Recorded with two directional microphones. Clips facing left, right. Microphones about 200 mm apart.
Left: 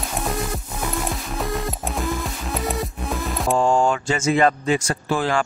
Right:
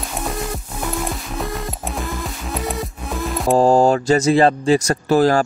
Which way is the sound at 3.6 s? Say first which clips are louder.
Right 6 dB; 35° right (ahead or behind).